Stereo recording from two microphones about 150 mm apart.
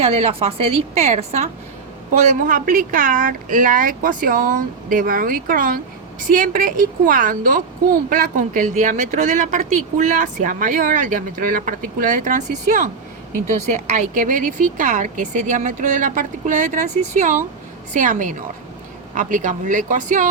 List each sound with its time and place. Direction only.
0.0 s a woman's voice: 45° right (ahead or behind)
2.1 s speech: 65° right (ahead or behind)